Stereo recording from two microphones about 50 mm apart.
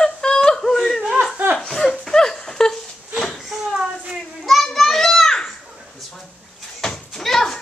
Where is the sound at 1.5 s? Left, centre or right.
Centre.